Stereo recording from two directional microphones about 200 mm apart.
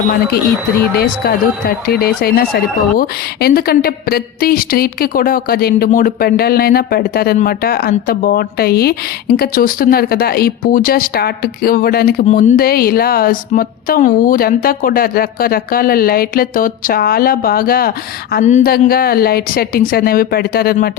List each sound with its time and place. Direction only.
0.9 s speech: 50° left (ahead or behind)
12.2 s speech: 35° left (ahead or behind)